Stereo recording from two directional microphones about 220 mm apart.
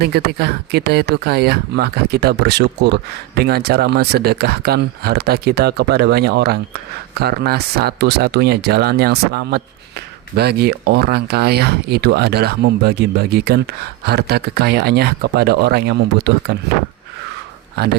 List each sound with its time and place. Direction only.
0.0 s speech: 45° right (ahead or behind)
17.8 s speech: 45° right (ahead or behind)